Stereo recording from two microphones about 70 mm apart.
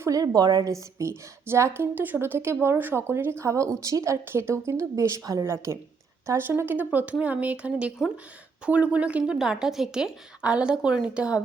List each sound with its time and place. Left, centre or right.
0.1 s a woman's voice: right
6.5 s a woman's voice: right